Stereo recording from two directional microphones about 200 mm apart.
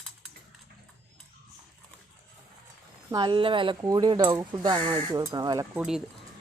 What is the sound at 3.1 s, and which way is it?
Speech, 25° right (ahead or behind).